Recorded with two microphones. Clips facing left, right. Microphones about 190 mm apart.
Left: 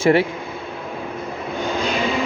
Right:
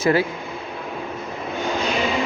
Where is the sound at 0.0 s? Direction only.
25° left (ahead or behind).